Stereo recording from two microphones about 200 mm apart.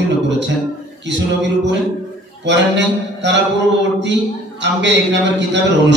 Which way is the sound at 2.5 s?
60° right (ahead or behind).